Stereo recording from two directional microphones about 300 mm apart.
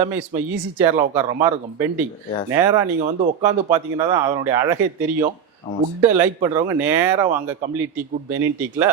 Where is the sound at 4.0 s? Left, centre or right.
Centre.